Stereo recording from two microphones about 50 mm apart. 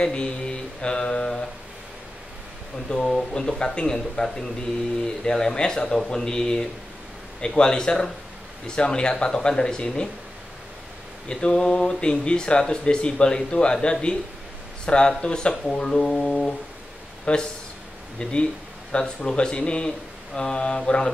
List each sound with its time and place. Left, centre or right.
0.0 s speech: centre
2.9 s speech: centre
11.2 s speech: centre